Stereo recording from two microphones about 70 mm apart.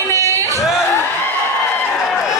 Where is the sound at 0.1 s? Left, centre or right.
Right.